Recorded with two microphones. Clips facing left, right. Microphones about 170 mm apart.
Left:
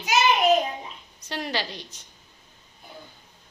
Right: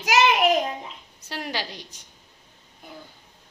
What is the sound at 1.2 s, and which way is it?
Speech, 10° right (ahead or behind).